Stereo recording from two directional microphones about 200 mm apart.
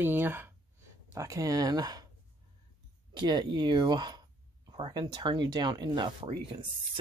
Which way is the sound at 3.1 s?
20° right (ahead or behind).